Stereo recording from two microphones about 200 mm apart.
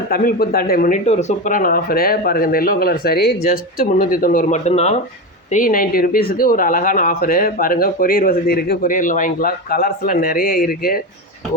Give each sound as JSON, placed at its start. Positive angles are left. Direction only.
{"t": 0.1, "sound": "speech", "side_deg": 50}